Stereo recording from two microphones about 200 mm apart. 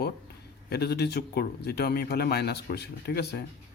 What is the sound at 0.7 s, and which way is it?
A man's voice, 55° left (ahead or behind).